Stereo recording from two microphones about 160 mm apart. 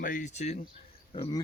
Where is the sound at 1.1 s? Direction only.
30° left (ahead or behind).